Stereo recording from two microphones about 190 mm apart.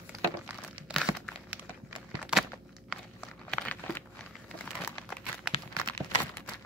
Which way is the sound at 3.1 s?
10° left (ahead or behind).